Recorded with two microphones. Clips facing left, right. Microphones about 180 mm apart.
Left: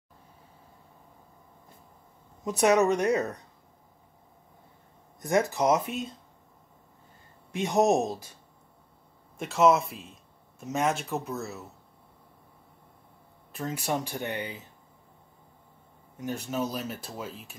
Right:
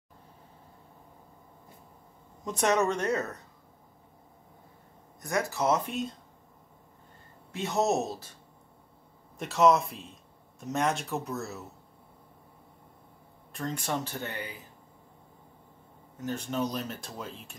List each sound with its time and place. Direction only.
2.4 s speech: 10° left (ahead or behind)
5.2 s speech: 20° left (ahead or behind); by 6.1 s centre (ahead or behind)
7.5 s speech: 15° left (ahead or behind)
9.4 s speech: centre (ahead or behind)
13.5 s speech: 5° left (ahead or behind)
16.2 s speech: 10° left (ahead or behind)